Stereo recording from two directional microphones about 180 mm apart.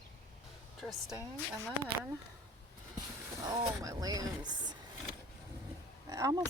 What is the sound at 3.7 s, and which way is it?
Speech, 20° right (ahead or behind).